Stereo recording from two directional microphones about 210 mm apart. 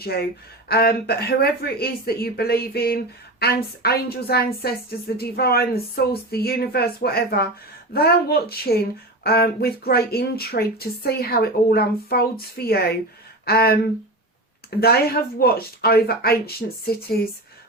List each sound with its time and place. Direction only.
0.0 s speech: 50° left (ahead or behind)